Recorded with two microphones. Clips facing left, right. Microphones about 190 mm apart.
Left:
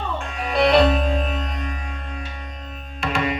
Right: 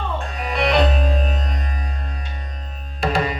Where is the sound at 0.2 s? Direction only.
35° right (ahead or behind).